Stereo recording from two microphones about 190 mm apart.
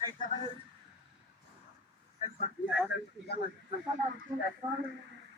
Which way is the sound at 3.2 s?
55° left (ahead or behind).